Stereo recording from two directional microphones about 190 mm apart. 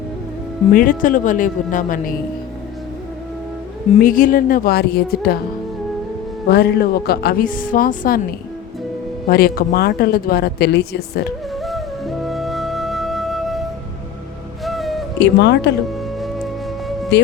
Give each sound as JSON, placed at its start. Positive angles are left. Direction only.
{"t": 0.7, "sound": "a woman's voice", "side_deg": 45}
{"t": 4.0, "sound": "a woman's voice", "side_deg": 45}
{"t": 6.5, "sound": "a woman's voice", "side_deg": 60}
{"t": 9.3, "sound": "speech", "side_deg": 55}
{"t": 11.5, "sound": "music", "side_deg": 0}
{"t": 15.2, "sound": "speech", "side_deg": 65}
{"t": 17.1, "sound": "speech", "side_deg": 65}